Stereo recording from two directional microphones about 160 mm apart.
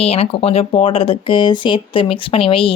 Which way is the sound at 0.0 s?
40° left (ahead or behind).